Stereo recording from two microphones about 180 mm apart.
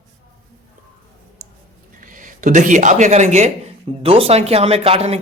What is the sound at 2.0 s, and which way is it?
Speech, 45° right (ahead or behind).